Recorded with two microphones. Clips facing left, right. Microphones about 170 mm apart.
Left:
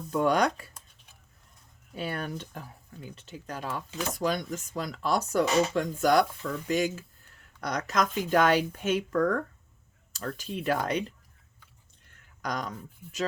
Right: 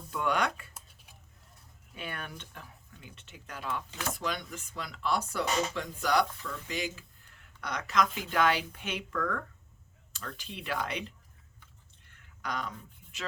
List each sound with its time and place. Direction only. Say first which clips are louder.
0.1 s speech: left 6 dB; 40° left (ahead or behind)
2.0 s speech: left 8 dB; 35° left (ahead or behind)
12.4 s speech: left 4 dB; 40° left (ahead or behind)